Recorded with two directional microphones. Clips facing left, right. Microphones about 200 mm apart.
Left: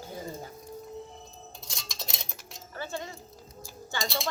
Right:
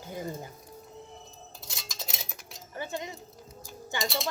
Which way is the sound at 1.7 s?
5° right (ahead or behind).